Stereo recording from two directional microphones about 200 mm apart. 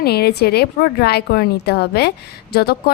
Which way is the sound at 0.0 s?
55° left (ahead or behind).